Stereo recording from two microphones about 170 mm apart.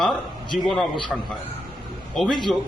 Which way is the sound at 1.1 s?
5° right (ahead or behind).